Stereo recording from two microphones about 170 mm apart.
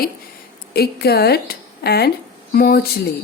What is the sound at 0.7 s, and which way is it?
Speech, 70° left (ahead or behind).